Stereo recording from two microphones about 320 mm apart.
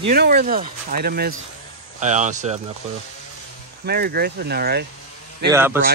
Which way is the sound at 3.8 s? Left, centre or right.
Right.